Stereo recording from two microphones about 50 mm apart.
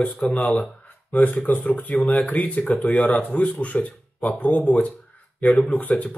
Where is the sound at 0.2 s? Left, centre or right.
Left.